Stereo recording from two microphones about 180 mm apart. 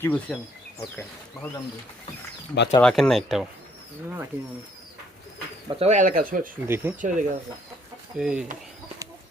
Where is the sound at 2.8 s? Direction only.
5° left (ahead or behind).